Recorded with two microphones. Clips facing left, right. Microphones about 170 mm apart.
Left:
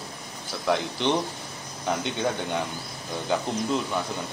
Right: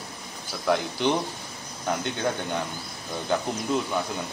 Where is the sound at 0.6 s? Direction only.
5° right (ahead or behind).